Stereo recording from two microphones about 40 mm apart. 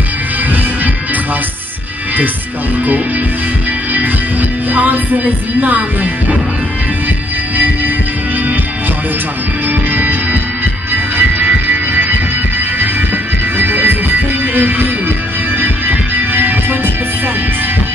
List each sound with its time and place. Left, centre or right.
3.9 s music: right
9.7 s music: right